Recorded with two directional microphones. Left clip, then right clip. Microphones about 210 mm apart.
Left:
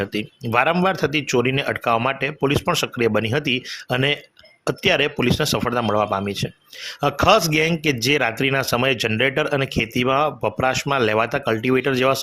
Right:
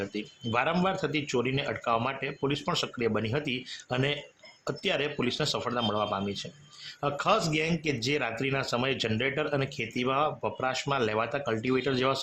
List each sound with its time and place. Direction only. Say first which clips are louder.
0.0 s speech: left 9 dB; 25° left (ahead or behind)